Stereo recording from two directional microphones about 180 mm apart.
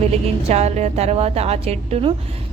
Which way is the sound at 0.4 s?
35° right (ahead or behind).